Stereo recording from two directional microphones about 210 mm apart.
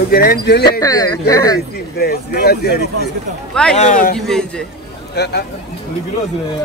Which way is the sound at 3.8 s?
40° left (ahead or behind).